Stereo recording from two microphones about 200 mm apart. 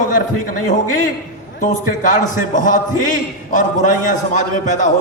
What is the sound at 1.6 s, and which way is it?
A man's voice, 40° left (ahead or behind).